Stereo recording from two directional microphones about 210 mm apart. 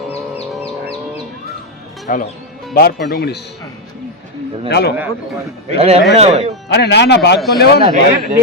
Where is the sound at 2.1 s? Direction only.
40° left (ahead or behind).